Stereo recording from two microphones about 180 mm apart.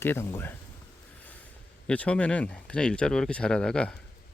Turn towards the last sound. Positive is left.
turn(degrees=5)  # may be behind; listen again after turning